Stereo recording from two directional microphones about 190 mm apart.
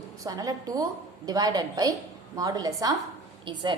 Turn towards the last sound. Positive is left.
turn(degrees=-25)  # may be behind; listen again after turning